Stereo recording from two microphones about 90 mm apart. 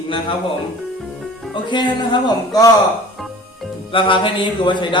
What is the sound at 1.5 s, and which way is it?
Speech, 60° left (ahead or behind).